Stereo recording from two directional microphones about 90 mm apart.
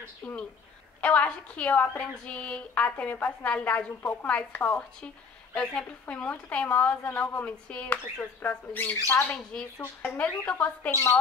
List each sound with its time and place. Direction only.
0.2 s speech: 5° left (ahead or behind)
1.0 s speech: 15° left (ahead or behind)
9.3 s speech: 5° left (ahead or behind)